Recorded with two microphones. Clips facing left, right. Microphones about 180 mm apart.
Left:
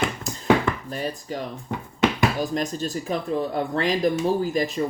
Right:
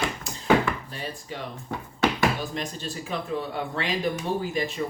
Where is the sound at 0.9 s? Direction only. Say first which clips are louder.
Left 6 dB; 45° left (ahead or behind).